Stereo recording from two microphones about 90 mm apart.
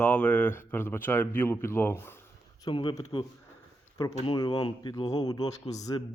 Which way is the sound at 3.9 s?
50° left (ahead or behind).